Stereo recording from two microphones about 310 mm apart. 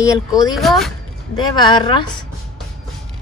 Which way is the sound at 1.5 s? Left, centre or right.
Centre.